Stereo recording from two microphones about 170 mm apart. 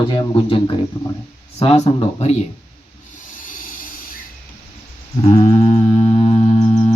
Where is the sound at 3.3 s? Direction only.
50° left (ahead or behind).